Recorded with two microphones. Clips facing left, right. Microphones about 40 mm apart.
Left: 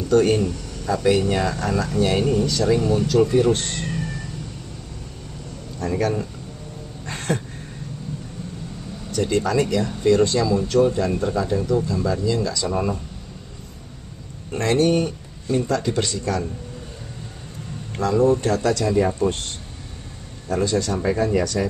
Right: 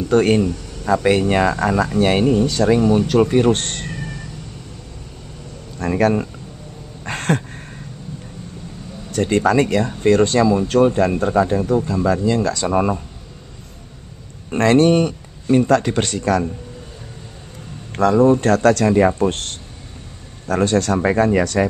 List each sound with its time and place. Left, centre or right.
0.1 s speech: right
5.8 s speech: right
7.1 s a sound: right
9.1 s speech: right
14.5 s speech: right
17.9 s speech: right